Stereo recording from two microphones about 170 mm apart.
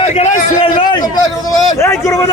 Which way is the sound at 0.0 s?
40° left (ahead or behind).